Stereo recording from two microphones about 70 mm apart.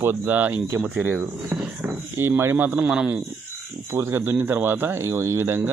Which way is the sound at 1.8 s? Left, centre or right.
Right.